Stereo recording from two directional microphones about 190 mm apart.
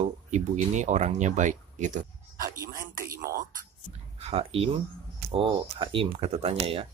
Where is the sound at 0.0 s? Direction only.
40° right (ahead or behind).